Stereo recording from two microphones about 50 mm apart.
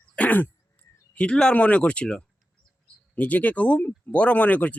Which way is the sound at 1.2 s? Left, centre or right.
Centre.